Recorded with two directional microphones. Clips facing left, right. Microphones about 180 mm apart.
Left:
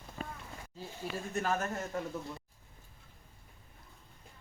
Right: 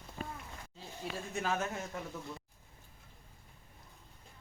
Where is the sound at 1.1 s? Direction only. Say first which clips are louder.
Left 2 dB; centre (ahead or behind).